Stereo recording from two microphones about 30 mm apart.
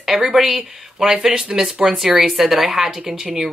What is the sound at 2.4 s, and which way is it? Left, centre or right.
Speech, centre.